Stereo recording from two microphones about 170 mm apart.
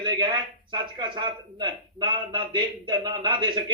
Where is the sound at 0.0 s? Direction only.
25° right (ahead or behind).